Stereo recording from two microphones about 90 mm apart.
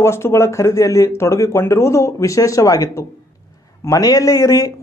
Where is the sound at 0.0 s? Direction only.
30° left (ahead or behind).